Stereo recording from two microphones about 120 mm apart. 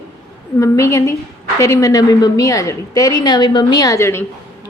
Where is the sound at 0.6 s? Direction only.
25° left (ahead or behind).